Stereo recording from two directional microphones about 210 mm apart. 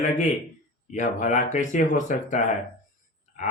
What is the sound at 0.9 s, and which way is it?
Speech, 35° left (ahead or behind).